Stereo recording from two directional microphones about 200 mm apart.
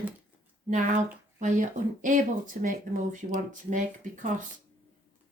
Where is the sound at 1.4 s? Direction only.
40° right (ahead or behind).